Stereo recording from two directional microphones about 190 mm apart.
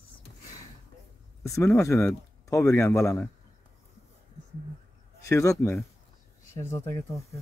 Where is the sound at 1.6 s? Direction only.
15° left (ahead or behind).